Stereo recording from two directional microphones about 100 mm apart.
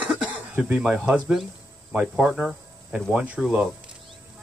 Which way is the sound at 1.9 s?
10° right (ahead or behind).